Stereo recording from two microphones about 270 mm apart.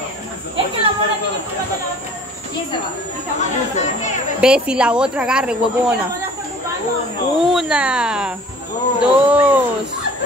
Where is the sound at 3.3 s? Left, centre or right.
Left.